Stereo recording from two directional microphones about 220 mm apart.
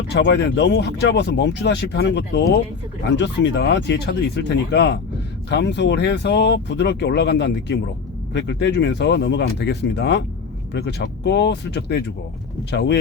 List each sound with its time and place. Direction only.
0.1 s speech: 50° left (ahead or behind)